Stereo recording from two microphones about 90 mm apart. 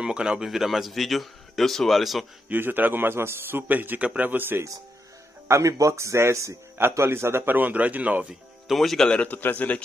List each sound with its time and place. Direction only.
0.0 s a man's voice: 10° right (ahead or behind)
2.5 s a man's voice: 20° right (ahead or behind)
5.5 s a man's voice: 35° right (ahead or behind); by 8.3 s 20° right (ahead or behind)
8.3 s speech: centre (ahead or behind); by 9.8 s 15° left (ahead or behind)